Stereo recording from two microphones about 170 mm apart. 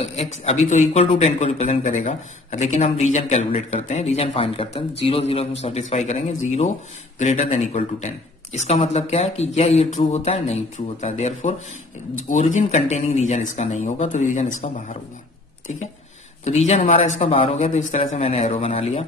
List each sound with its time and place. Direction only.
0.0 s speech: 40° left (ahead or behind)
16.4 s speech: 40° left (ahead or behind)